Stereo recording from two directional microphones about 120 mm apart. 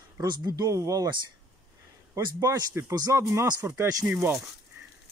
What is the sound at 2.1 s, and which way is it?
Speech, 30° right (ahead or behind).